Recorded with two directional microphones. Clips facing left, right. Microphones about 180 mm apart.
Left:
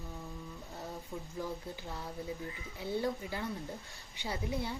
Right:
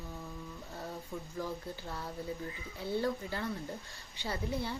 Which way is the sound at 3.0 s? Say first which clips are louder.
Right 1 dB; 15° left (ahead or behind).